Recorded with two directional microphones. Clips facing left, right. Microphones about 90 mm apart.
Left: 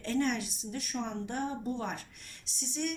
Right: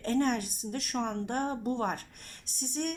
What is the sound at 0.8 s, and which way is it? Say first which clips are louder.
Speech: right 3 dB; 65° right (ahead or behind).